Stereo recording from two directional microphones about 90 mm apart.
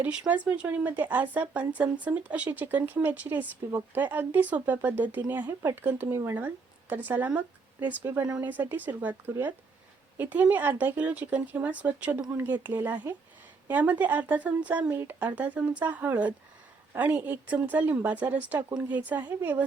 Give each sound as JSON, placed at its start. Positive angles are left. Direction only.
{"t": 0.0, "sound": "speech", "side_deg": -15}
{"t": 6.1, "sound": "speech", "side_deg": -30}
{"t": 6.3, "sound": "speech", "side_deg": -20}